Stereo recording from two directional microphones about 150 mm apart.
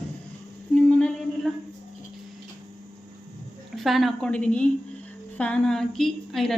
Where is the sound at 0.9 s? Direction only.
5° left (ahead or behind).